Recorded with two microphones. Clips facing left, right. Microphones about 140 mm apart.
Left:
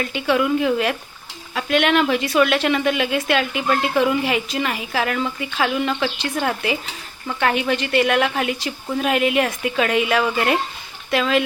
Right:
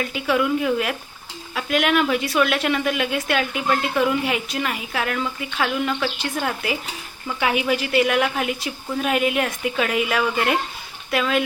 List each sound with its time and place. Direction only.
0.0 s a woman's voice: centre (ahead or behind)